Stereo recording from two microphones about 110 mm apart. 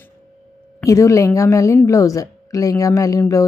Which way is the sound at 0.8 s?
30° left (ahead or behind).